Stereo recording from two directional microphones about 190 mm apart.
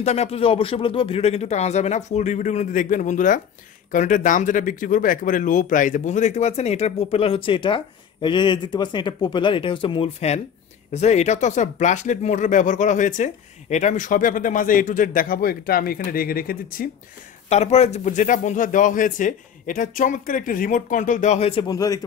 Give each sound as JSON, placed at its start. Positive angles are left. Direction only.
{"t": 0.0, "sound": "speech", "side_deg": 35}
{"t": 17.5, "sound": "speech", "side_deg": 35}
{"t": 21.6, "sound": "speech", "side_deg": 20}